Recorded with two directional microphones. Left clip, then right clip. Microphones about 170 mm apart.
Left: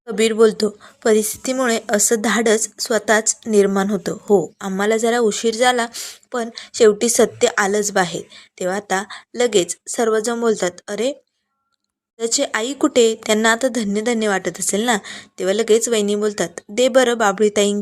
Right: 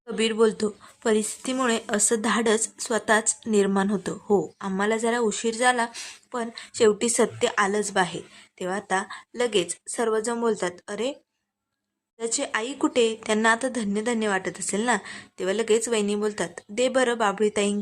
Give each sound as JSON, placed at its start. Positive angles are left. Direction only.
{"t": 0.0, "sound": "a woman's voice", "side_deg": 25}
{"t": 12.2, "sound": "a woman's voice", "side_deg": 25}